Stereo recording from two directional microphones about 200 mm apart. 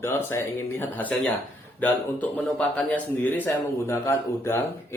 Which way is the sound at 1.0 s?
10° left (ahead or behind).